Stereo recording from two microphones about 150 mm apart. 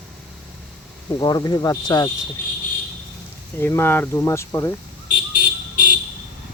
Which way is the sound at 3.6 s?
15° left (ahead or behind).